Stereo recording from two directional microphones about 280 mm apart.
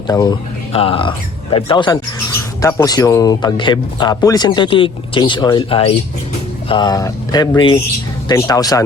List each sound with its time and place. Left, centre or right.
0.1 s speech: centre